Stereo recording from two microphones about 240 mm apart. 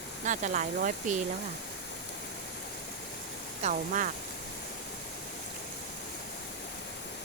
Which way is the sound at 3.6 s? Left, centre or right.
Right.